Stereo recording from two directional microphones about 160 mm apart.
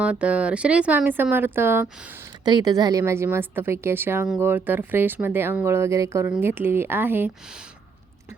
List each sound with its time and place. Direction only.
0.0 s speech: 10° right (ahead or behind)
2.4 s speech: 25° right (ahead or behind)